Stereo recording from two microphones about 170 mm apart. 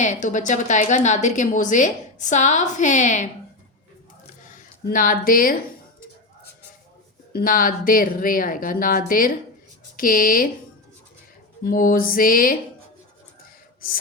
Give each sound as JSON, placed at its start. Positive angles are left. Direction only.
{"t": 0.0, "sound": "a woman's voice", "side_deg": 45}
{"t": 4.4, "sound": "speech", "side_deg": 50}
{"t": 7.3, "sound": "speech", "side_deg": 55}
{"t": 11.6, "sound": "speech", "side_deg": 55}